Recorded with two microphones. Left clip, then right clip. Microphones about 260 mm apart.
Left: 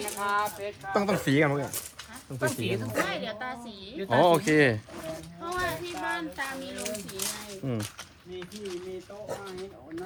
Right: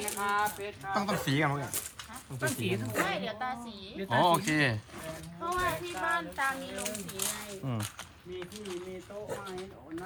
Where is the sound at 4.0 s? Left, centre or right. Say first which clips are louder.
Left 4 dB; centre.